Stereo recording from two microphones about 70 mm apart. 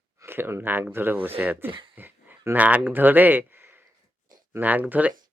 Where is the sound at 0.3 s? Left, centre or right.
Right.